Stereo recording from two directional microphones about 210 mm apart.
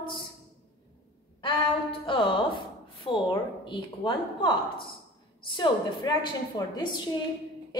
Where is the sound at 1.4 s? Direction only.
25° left (ahead or behind).